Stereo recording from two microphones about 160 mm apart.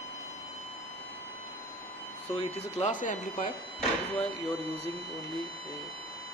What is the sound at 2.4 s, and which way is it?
Speech, 50° left (ahead or behind).